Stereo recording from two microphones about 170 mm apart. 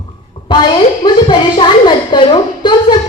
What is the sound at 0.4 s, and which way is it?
A woman's voice, 25° left (ahead or behind).